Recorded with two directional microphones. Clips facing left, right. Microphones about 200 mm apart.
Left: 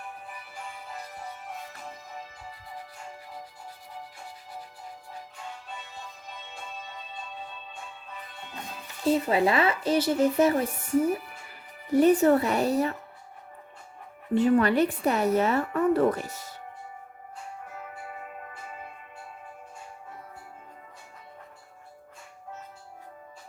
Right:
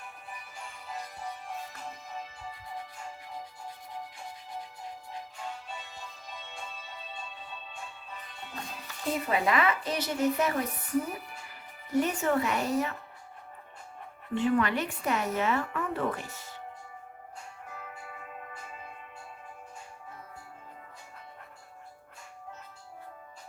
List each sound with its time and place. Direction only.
9.0 s speech: 30° left (ahead or behind)
11.9 s speech: 35° left (ahead or behind)
14.3 s speech: 40° left (ahead or behind)